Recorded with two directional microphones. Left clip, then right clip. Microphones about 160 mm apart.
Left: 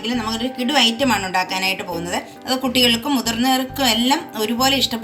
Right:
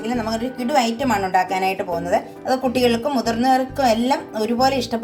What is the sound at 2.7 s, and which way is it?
Speech, 60° right (ahead or behind).